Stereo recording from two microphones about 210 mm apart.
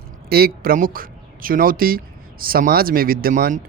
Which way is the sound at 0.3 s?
45° right (ahead or behind).